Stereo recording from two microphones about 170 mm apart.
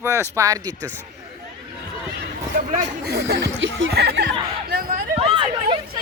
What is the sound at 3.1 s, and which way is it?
Speech, 75° right (ahead or behind).